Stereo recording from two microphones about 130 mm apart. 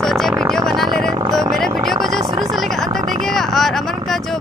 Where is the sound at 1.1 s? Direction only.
30° right (ahead or behind).